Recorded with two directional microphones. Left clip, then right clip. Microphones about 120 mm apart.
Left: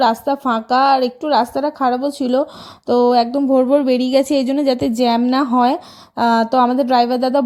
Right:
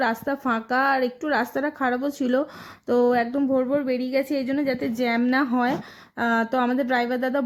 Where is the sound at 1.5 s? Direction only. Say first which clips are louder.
Left 7 dB; 15° left (ahead or behind).